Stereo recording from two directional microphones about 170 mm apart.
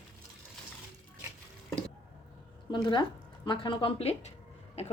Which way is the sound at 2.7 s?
25° left (ahead or behind).